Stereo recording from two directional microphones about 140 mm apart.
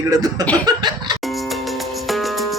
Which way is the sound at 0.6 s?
30° right (ahead or behind).